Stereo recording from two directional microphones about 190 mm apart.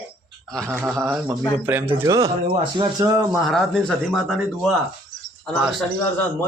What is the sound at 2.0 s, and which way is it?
A man's voice, 15° right (ahead or behind).